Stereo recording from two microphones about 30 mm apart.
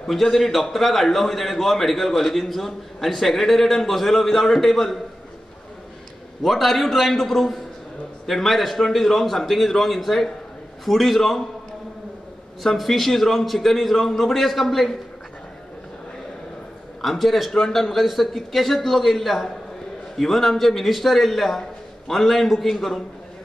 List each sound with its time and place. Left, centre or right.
0.0 s a man's voice: centre
6.4 s a man's voice: centre
12.6 s a man's voice: centre
17.0 s a man's voice: centre
17.5 s a man's voice: centre
17.7 s a man's voice: centre